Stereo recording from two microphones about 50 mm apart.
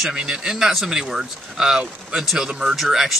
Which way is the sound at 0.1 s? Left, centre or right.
Centre.